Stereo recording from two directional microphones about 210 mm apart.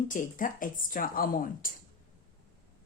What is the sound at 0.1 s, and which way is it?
Speech, 40° left (ahead or behind).